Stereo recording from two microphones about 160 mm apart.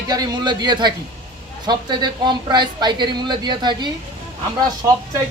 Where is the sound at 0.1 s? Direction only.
25° right (ahead or behind).